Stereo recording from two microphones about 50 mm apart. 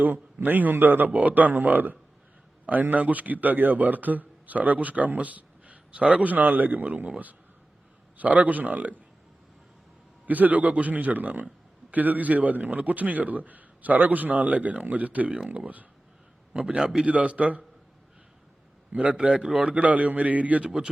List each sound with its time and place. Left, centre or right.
0.0 s a man's voice: right
8.2 s a man's voice: right
10.2 s a man's voice: right
16.5 s a man's voice: centre
17.1 s a man's voice: right
18.9 s a man's voice: right